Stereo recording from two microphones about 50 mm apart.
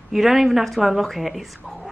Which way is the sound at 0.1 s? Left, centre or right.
Centre.